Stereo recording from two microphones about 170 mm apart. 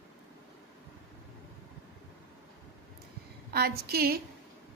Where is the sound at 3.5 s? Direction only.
65° right (ahead or behind).